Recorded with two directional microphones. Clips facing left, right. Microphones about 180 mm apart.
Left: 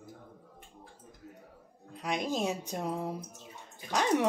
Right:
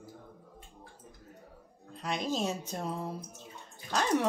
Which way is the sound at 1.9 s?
10° left (ahead or behind).